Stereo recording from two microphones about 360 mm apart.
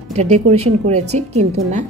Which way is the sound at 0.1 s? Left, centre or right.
Centre.